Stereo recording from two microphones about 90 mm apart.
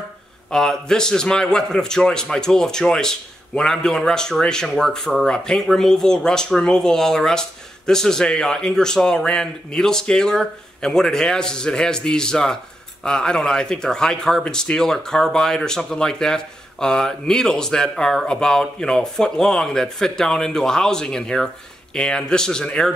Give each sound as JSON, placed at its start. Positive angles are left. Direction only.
{"t": 0.5, "sound": "a man's voice", "side_deg": 5}